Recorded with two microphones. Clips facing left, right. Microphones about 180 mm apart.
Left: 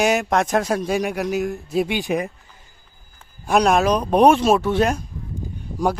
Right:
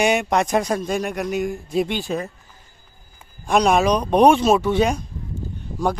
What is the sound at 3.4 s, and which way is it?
Speech, 5° left (ahead or behind).